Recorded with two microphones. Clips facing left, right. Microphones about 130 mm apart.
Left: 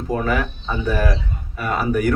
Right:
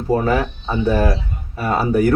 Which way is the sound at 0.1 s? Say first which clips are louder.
Right 4 dB; 30° right (ahead or behind).